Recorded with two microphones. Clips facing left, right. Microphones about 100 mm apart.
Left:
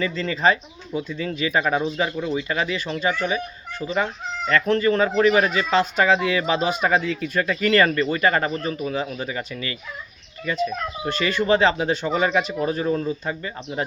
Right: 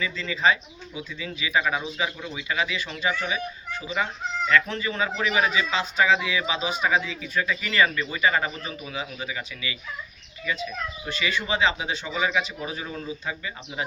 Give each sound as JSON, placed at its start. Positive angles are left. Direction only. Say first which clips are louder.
{"t": 0.0, "sound": "speech", "louder": "left 4 dB", "side_deg": 45}